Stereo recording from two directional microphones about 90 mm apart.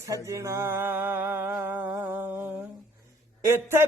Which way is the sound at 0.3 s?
30° right (ahead or behind).